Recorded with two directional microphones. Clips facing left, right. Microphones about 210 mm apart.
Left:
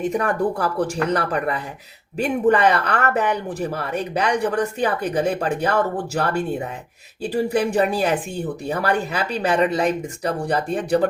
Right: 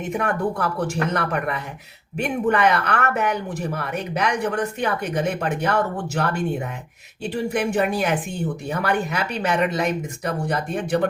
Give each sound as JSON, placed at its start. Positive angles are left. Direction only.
{"t": 0.0, "sound": "speech", "side_deg": 35}